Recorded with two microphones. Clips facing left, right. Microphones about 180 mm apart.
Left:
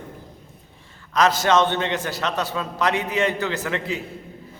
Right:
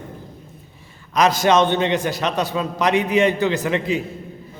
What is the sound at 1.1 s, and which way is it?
A man's voice, 15° right (ahead or behind).